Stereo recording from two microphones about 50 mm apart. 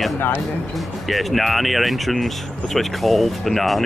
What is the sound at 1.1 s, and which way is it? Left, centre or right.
Speech, centre.